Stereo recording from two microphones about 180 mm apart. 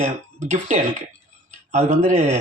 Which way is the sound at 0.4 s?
40° right (ahead or behind).